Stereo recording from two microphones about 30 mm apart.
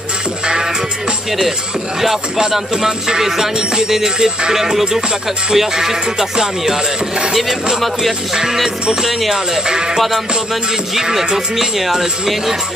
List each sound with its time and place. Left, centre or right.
3.1 s speech: centre
9.9 s music: centre
11.0 s speech: centre